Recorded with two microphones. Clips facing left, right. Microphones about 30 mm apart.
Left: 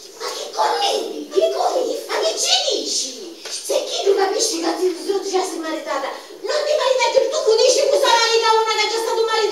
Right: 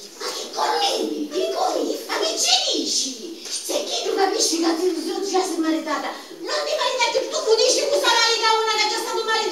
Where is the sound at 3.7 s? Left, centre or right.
Centre.